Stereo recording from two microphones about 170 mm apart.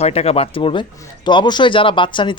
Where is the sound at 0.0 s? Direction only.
40° left (ahead or behind).